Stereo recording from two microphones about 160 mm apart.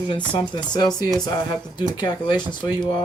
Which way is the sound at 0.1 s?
30° left (ahead or behind).